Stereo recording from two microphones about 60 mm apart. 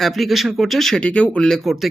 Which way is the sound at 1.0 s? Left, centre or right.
Left.